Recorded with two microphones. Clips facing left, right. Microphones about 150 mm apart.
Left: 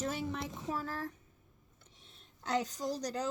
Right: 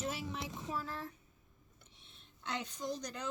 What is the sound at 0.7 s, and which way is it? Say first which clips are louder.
A woman's voice: left 5 dB; 45° left (ahead or behind).